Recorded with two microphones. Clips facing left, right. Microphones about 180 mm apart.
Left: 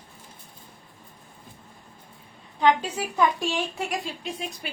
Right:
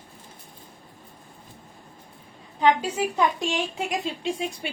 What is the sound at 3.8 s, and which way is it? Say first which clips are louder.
Speech: right 2 dB; 20° right (ahead or behind).